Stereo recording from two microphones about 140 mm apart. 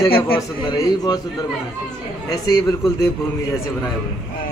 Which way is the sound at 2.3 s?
25° left (ahead or behind).